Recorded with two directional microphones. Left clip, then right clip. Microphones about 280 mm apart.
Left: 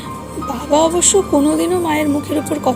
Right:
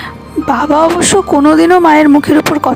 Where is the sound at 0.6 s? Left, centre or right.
Right.